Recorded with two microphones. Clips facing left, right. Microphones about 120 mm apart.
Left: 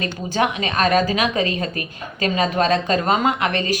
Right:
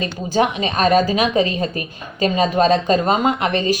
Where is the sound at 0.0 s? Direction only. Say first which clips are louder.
Right 3 dB; 25° right (ahead or behind).